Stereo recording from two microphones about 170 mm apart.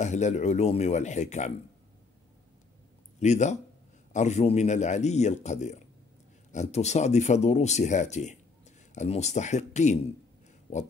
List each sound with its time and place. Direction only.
0.0 s speech: 40° left (ahead or behind)
3.2 s speech: 45° left (ahead or behind)